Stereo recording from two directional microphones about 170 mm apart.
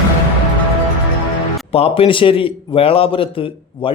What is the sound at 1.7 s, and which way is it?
A man's voice, 35° left (ahead or behind).